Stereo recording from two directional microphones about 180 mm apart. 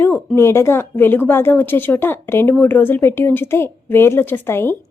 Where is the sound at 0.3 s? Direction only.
15° left (ahead or behind).